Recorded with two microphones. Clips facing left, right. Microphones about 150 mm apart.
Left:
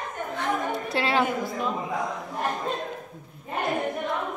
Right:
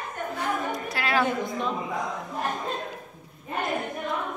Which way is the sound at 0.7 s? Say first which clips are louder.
Left 2 dB; 25° left (ahead or behind).